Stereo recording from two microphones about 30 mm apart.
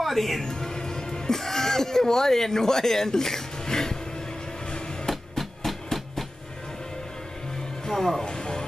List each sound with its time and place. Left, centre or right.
0.0 s a woman's voice: centre
0.5 s music: left
5.1 s music: centre
7.8 s music: centre
8.3 s a sound: left